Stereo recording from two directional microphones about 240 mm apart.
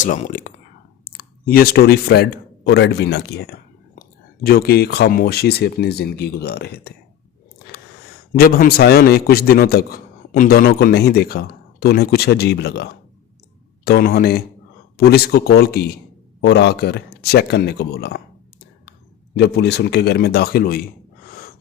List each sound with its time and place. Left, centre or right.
0.0 s a man's voice: left
8.3 s a man's voice: left
19.4 s speech: left